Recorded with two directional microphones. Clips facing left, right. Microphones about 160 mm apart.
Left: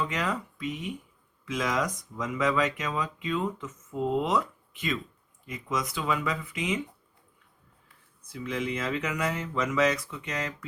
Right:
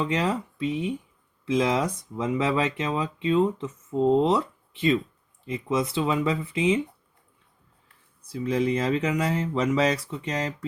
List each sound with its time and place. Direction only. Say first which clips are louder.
0.0 s speech: right 5 dB; 30° right (ahead or behind)
8.3 s speech: right 7 dB; 35° right (ahead or behind)